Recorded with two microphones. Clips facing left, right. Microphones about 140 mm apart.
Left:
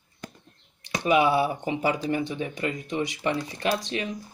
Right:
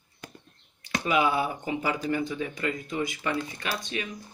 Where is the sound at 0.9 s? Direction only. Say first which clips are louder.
Left 4 dB; 30° left (ahead or behind).